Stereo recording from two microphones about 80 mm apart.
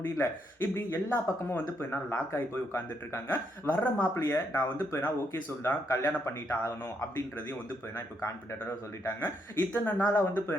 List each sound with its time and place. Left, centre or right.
0.0 s speech: left
9.0 s speech: left